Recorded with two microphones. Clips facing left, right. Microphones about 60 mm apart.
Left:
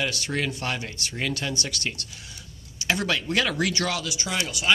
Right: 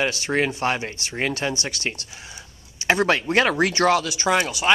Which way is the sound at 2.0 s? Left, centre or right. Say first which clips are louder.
Right 3 dB; right.